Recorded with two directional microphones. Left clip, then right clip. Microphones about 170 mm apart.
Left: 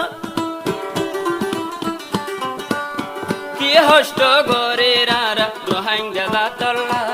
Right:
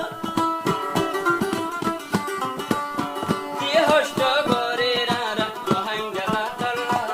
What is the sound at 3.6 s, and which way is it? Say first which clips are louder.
Music: left 7 dB; 60° left (ahead or behind).